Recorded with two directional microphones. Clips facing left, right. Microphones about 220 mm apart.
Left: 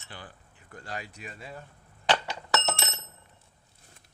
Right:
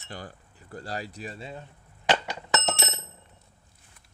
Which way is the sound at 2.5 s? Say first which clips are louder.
Right 1 dB; 20° right (ahead or behind).